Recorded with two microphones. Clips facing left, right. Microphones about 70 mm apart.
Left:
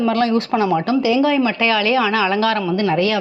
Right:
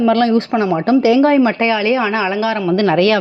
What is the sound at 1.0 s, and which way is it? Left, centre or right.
Speech, right.